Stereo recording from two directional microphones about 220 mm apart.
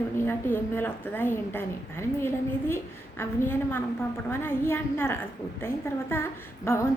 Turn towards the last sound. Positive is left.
turn(degrees=10)  # may be behind; listen again after turning